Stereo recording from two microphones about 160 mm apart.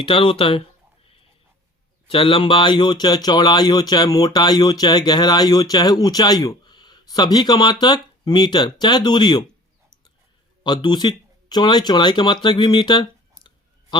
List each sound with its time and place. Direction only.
0.0 s speech: 35° left (ahead or behind)
2.0 s speech: 35° left (ahead or behind)
10.6 s speech: 30° left (ahead or behind)